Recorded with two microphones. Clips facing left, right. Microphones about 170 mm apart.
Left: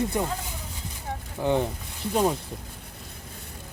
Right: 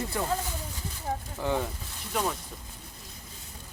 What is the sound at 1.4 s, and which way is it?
Speech, 20° left (ahead or behind).